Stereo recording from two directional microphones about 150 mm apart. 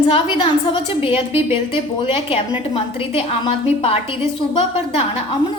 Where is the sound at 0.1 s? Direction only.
35° left (ahead or behind).